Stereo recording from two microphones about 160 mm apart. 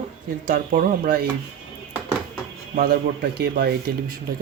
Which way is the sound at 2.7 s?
65° right (ahead or behind).